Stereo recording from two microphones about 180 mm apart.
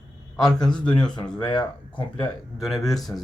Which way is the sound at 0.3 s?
Centre (ahead or behind).